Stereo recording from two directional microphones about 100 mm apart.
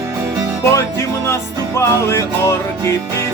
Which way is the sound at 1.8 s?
30° left (ahead or behind).